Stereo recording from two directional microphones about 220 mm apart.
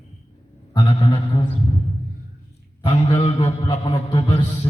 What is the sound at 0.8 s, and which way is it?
Speech, 30° left (ahead or behind).